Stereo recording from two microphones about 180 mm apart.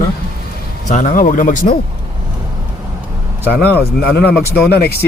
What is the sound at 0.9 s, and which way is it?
Speech, 45° left (ahead or behind).